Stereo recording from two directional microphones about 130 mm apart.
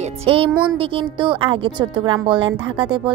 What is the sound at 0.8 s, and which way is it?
A woman's voice, 40° right (ahead or behind).